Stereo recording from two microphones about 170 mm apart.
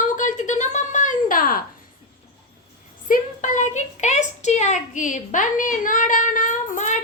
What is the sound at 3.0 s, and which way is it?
A woman's voice, 50° left (ahead or behind).